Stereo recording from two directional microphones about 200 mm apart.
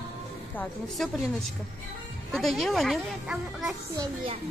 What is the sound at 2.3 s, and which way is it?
Speech, centre (ahead or behind).